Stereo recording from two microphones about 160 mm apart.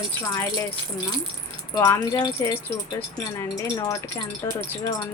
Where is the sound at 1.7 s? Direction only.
20° left (ahead or behind).